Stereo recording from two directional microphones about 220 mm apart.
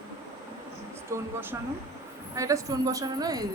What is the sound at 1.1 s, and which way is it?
A woman's voice, 10° right (ahead or behind).